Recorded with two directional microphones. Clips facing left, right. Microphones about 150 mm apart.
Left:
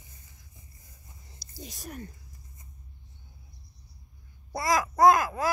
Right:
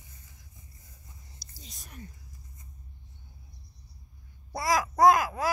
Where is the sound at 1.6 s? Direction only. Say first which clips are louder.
Left 10 dB; 65° left (ahead or behind).